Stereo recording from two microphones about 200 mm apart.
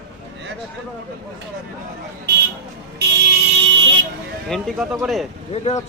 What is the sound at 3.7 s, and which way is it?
Vehicle, 65° right (ahead or behind).